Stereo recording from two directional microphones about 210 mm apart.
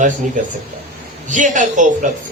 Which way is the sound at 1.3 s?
35° right (ahead or behind).